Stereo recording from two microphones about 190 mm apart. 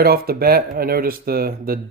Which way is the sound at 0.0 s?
55° right (ahead or behind).